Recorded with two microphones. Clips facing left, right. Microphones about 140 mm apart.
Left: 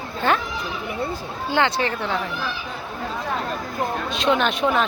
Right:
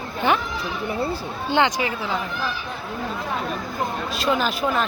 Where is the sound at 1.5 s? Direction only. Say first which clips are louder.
Even; 15° right (ahead or behind).